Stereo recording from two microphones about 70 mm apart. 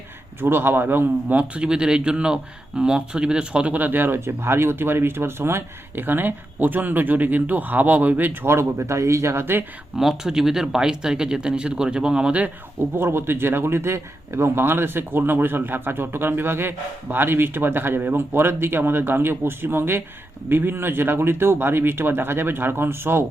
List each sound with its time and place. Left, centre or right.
0.4 s speech: right
10.0 s speech: centre
13.0 s a man's voice: right